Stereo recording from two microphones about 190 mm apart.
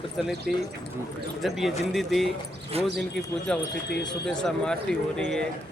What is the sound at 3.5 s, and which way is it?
Speech, 5° left (ahead or behind).